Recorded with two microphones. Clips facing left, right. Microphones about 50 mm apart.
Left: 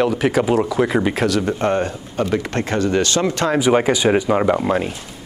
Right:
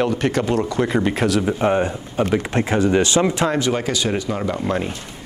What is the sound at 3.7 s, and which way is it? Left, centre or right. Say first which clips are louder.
Speech: left 6 dB; left.